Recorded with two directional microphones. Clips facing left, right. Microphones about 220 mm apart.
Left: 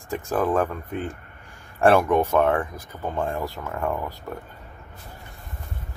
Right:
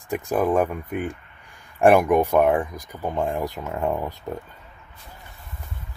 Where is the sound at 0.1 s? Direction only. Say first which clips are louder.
Right 2 dB; 15° right (ahead or behind).